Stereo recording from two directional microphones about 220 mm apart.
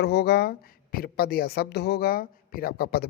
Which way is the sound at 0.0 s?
50° left (ahead or behind).